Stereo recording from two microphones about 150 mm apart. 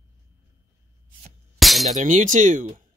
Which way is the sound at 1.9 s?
55° right (ahead or behind).